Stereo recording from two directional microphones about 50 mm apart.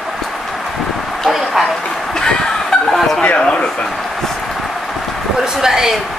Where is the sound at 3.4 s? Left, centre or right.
Centre.